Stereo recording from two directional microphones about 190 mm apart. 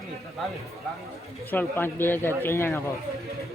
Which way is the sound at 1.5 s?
10° left (ahead or behind).